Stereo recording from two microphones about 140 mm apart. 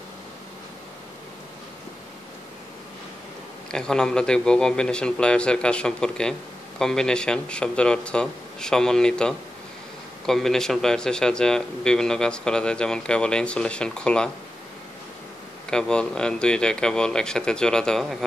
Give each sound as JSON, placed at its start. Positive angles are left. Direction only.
{"t": 3.7, "sound": "speech", "side_deg": 5}
{"t": 15.7, "sound": "speech", "side_deg": 5}